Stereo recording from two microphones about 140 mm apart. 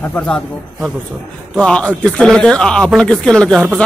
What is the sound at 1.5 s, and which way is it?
Speech, 5° left (ahead or behind).